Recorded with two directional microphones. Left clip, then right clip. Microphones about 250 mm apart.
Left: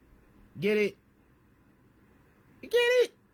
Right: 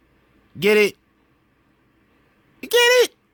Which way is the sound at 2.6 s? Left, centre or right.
Right.